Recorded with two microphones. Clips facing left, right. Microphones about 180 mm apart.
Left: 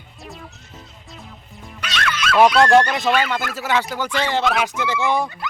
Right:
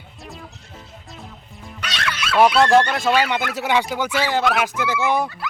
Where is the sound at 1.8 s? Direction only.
30° right (ahead or behind).